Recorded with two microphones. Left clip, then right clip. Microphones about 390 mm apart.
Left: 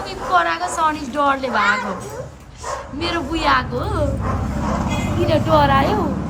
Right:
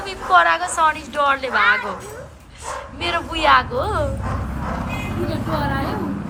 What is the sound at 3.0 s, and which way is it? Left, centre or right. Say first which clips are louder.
Speech: right 1 dB; centre.